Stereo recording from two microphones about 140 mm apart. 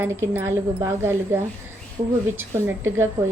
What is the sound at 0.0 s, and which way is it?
A woman's voice, 15° right (ahead or behind).